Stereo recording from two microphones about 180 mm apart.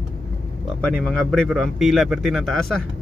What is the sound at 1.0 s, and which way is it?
Speech, 5° left (ahead or behind).